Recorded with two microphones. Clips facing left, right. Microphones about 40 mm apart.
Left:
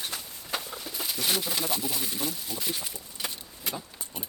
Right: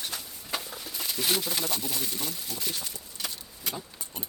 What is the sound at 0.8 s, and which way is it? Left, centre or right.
Speech, centre.